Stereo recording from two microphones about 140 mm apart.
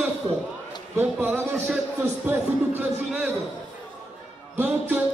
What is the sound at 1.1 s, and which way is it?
Speech, 10° right (ahead or behind).